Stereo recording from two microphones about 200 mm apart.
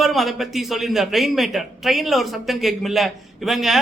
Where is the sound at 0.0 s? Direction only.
Centre (ahead or behind).